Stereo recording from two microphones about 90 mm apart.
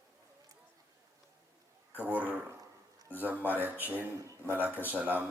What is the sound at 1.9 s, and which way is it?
Speech, 20° right (ahead or behind).